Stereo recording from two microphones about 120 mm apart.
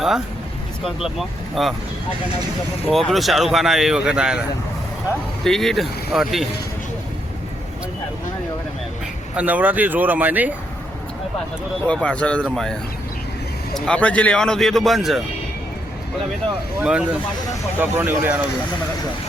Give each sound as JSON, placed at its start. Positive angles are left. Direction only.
{"t": 1.6, "sound": "speech", "side_deg": 0}
{"t": 2.9, "sound": "speech", "side_deg": 0}
{"t": 5.5, "sound": "speech", "side_deg": 5}
{"t": 9.3, "sound": "speech", "side_deg": -10}
{"t": 11.9, "sound": "speech", "side_deg": 10}
{"t": 13.7, "sound": "speech", "side_deg": 10}
{"t": 16.8, "sound": "speech", "side_deg": -10}